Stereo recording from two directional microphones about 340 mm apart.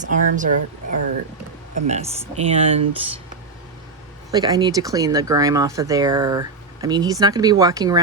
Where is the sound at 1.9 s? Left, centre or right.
Centre.